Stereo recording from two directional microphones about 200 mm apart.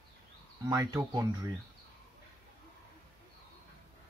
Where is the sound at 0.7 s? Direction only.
15° right (ahead or behind).